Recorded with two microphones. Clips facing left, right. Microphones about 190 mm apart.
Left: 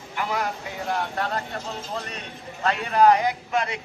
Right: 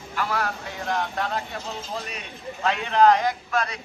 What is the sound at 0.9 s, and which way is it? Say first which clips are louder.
Speech: right 1 dB; centre (ahead or behind).